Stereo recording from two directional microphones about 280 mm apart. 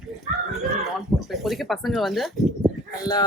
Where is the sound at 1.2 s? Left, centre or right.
Centre.